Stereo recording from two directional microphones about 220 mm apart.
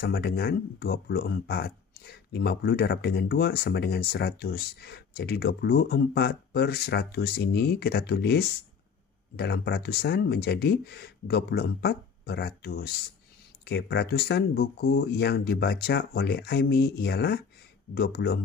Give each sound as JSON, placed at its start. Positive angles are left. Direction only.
{"t": 0.0, "sound": "speech", "side_deg": 45}